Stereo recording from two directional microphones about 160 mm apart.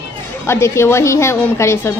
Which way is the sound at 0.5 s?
15° left (ahead or behind).